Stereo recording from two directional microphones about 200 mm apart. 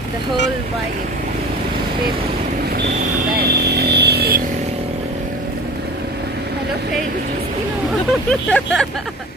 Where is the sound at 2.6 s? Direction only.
55° right (ahead or behind).